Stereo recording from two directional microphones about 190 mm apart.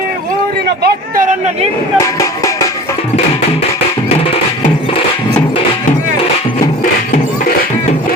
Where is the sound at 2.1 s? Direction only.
15° left (ahead or behind).